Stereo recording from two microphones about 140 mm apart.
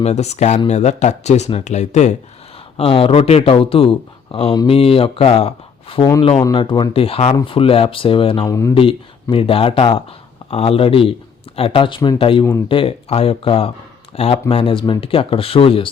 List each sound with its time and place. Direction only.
0.0 s speech: 50° left (ahead or behind)
2.7 s speech: 40° left (ahead or behind)
8.4 s speech: 20° left (ahead or behind)
8.7 s speech: 40° left (ahead or behind)